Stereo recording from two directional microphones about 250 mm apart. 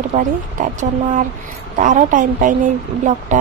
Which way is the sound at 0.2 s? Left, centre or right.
Right.